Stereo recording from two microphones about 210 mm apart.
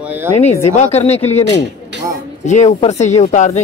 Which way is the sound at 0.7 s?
30° left (ahead or behind).